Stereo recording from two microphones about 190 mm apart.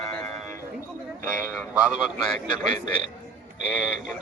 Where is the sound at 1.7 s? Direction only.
5° right (ahead or behind).